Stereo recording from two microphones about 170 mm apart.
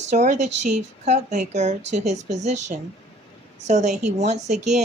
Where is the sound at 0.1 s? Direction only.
40° right (ahead or behind).